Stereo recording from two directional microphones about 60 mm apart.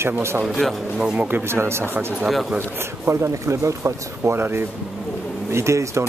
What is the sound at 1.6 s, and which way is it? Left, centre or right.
Speech, right.